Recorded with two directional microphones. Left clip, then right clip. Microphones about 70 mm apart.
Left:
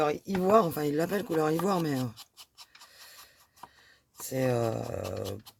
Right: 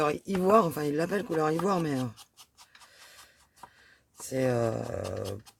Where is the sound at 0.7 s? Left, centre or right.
Centre.